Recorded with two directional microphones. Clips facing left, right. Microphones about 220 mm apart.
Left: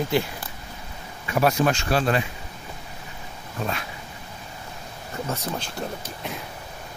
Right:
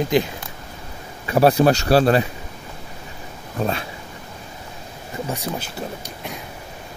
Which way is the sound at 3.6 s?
30° right (ahead or behind).